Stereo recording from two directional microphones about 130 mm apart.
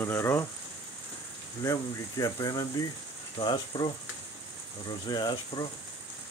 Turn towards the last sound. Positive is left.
turn(degrees=35)  # may be behind; listen again after turning